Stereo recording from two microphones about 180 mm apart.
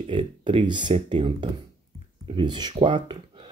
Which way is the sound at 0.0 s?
25° right (ahead or behind).